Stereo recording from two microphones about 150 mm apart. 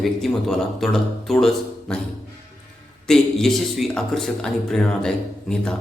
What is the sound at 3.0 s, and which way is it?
A man's voice, 5° left (ahead or behind).